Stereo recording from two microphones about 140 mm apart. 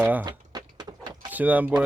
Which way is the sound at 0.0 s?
10° right (ahead or behind).